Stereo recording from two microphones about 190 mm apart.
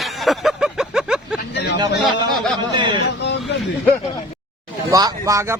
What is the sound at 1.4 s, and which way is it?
Vehicle, 60° left (ahead or behind).